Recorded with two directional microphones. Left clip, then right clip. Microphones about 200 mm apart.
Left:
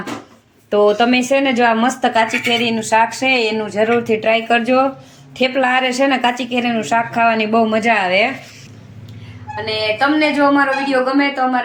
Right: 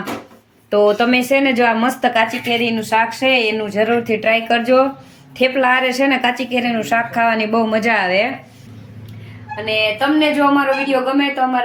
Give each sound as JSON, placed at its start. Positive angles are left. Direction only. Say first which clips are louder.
{"t": 0.7, "sound": "speech", "louder": "even", "side_deg": 0}
{"t": 9.6, "sound": "speech", "louder": "even", "side_deg": 5}